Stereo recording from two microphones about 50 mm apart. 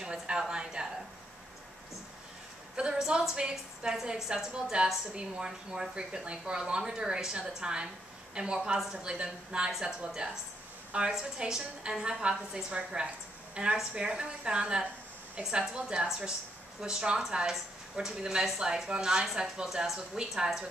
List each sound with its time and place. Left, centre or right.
0.0 s speech: centre
2.7 s a sound: centre
3.0 s speech: centre
5.1 s a woman's voice: centre